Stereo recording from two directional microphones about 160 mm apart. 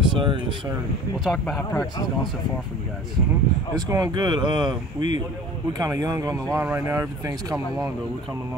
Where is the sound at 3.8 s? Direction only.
20° right (ahead or behind).